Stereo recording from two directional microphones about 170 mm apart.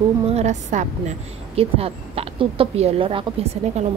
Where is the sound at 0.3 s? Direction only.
40° right (ahead or behind).